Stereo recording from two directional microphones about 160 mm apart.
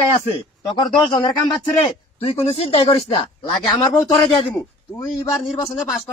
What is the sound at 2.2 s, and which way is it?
Speech, 40° left (ahead or behind).